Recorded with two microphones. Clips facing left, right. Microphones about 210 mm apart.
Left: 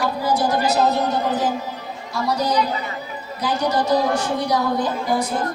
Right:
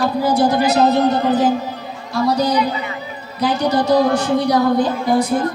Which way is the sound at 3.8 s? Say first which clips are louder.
Right 5 dB; 60° right (ahead or behind).